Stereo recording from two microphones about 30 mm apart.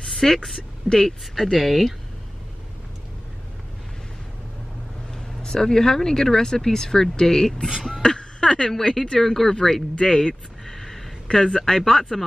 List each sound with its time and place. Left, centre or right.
0.1 s a woman's voice: centre
5.4 s speech: centre
7.7 s speech: centre
8.2 s a sound: left
8.5 s speech: centre
9.9 s speech: left
10.2 s a sound: centre
11.3 s speech: centre